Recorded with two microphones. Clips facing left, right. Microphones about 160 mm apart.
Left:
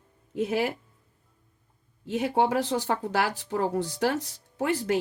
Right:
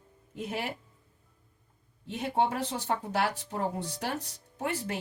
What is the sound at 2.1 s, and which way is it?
Speech, 90° left.